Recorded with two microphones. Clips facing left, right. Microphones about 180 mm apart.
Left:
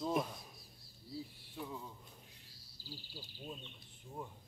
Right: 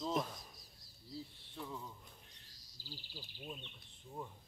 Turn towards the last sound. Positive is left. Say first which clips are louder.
# left 1 dB
turn(degrees=15)  # may be behind; listen again after turning